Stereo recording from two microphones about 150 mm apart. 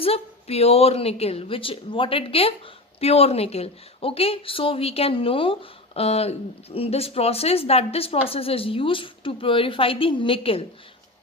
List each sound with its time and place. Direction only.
0.0 s a woman's voice: 40° left (ahead or behind)